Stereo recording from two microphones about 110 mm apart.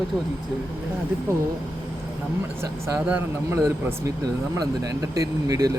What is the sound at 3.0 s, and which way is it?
Speech, 15° right (ahead or behind).